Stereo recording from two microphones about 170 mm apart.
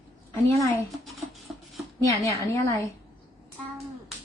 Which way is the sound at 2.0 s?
20° left (ahead or behind).